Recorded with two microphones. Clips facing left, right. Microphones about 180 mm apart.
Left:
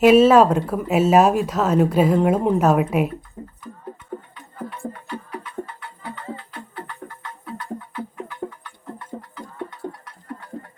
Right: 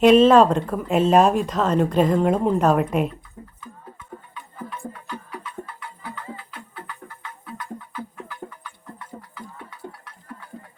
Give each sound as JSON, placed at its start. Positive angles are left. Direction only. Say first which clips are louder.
{"t": 0.0, "sound": "speech", "louder": "left 1 dB", "side_deg": 5}
{"t": 9.1, "sound": "music", "louder": "left 6 dB", "side_deg": 60}